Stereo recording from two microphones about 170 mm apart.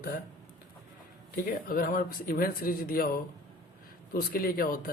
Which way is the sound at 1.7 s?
55° left (ahead or behind).